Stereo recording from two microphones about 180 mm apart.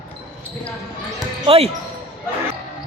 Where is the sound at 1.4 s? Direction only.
35° right (ahead or behind).